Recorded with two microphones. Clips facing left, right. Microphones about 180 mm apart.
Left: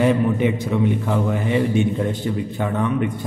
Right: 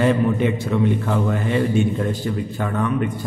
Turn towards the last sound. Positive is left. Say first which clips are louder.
# left 1 dB
turn(degrees=20)  # may be behind; listen again after turning